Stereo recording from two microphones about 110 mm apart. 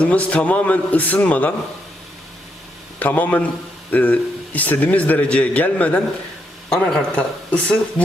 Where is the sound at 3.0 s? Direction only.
15° left (ahead or behind).